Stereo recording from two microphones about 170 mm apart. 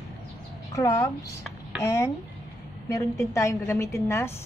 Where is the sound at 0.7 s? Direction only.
20° left (ahead or behind).